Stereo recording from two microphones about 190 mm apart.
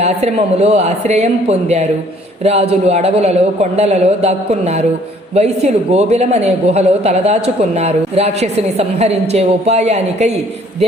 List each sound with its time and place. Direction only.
0.0 s speech: 35° right (ahead or behind)